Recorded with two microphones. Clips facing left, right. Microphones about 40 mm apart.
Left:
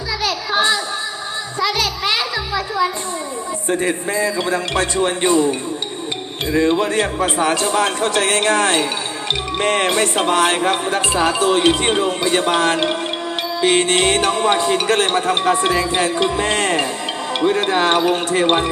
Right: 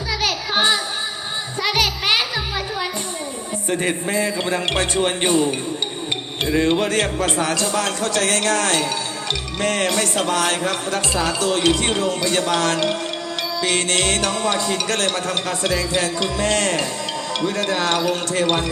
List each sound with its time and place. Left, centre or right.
0.5 s child singing: centre
1.6 s music: right
3.8 s a man's voice: right
6.6 s speech: right
7.0 s speech: centre